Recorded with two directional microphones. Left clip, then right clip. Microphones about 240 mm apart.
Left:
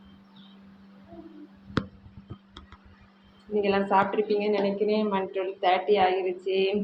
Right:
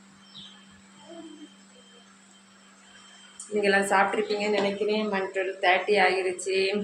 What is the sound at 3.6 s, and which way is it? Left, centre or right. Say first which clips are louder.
A woman's voice: right 1 dB; centre.